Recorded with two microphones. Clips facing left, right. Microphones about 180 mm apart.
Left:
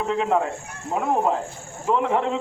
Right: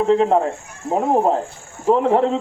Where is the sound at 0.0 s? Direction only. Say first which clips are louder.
Right 7 dB; 35° right (ahead or behind).